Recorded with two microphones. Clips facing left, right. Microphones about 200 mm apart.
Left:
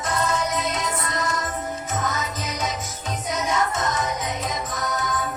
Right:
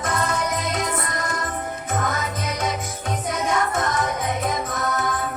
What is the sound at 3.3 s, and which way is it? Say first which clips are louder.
Music: right 1 dB; 55° right (ahead or behind).